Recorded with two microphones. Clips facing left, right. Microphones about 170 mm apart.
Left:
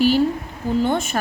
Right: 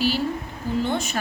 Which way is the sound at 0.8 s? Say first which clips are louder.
Left 5 dB; 50° left (ahead or behind).